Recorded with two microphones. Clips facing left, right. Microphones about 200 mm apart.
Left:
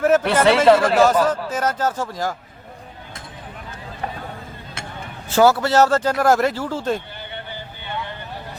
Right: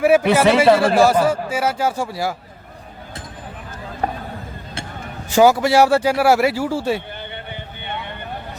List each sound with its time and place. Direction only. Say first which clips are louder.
0.0 s speech: right 2 dB; 10° right (ahead or behind)
4.0 s a sound: right 6 dB; 45° right (ahead or behind)
5.3 s speech: right 2 dB; 15° right (ahead or behind)